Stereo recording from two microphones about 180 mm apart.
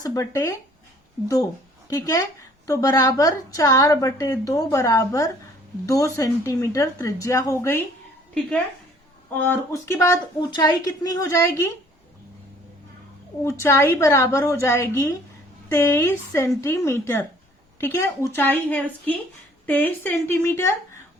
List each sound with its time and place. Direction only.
0.0 s speech: 20° left (ahead or behind)
1.9 s a woman's voice: 20° left (ahead or behind)
9.3 s speech: 10° left (ahead or behind)
13.4 s speech: 15° left (ahead or behind)